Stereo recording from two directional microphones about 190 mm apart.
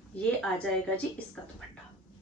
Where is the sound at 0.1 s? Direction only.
5° left (ahead or behind).